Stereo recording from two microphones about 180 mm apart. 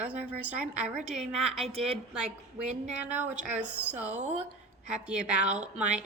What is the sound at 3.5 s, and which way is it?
A woman's voice, 10° right (ahead or behind).